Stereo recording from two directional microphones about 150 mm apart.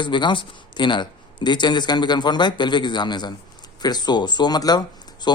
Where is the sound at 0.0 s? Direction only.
30° left (ahead or behind).